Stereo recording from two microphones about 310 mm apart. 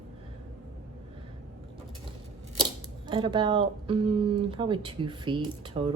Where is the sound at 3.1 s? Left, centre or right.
Centre.